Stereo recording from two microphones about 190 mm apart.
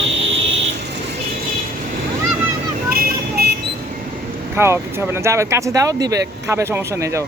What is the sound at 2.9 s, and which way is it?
Vehicle, 55° right (ahead or behind).